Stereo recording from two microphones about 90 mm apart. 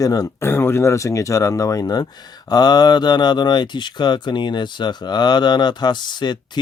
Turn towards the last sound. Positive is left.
turn(degrees=55)  # may be behind; listen again after turning